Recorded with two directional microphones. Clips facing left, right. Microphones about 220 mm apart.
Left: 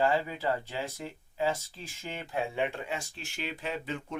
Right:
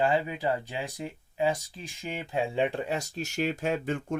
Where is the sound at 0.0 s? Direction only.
15° right (ahead or behind).